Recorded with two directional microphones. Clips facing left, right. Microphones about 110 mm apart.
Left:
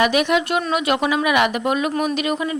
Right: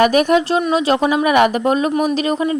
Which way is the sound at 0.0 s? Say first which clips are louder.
Right 5 dB; 40° right (ahead or behind).